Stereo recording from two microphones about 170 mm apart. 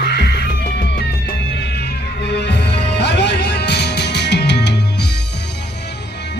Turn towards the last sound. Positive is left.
turn(degrees=80)